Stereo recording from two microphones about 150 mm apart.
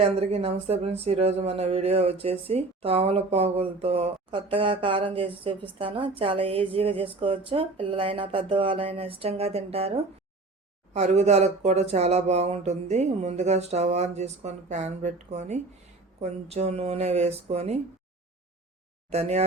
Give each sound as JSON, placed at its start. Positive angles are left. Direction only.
{"t": 0.0, "sound": "speech", "side_deg": -45}
{"t": 19.1, "sound": "speech", "side_deg": -45}